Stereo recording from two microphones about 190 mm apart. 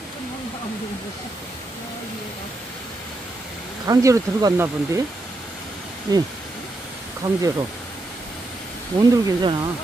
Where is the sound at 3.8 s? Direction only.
20° right (ahead or behind).